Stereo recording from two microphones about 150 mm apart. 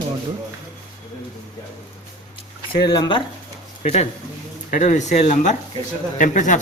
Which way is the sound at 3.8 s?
50° left (ahead or behind).